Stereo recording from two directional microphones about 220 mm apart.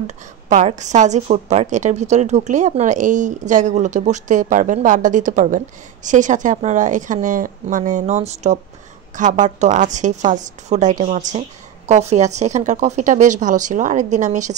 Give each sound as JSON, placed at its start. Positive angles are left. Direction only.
{"t": 0.0, "sound": "a woman's voice", "side_deg": -30}